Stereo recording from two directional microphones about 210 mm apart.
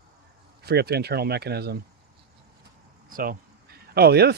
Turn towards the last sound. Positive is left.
turn(degrees=-50)  # may be behind; listen again after turning